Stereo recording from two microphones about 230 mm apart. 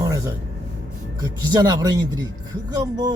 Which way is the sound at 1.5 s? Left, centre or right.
Centre.